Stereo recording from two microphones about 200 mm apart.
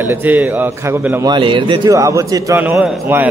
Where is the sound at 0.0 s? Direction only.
10° right (ahead or behind).